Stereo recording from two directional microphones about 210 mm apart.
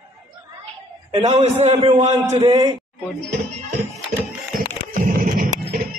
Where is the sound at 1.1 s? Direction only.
35° right (ahead or behind).